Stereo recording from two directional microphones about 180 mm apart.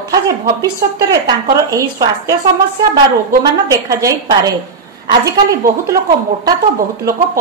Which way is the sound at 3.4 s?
20° right (ahead or behind).